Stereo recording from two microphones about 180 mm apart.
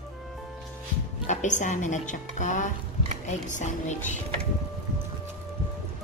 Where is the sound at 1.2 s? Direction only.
40° left (ahead or behind).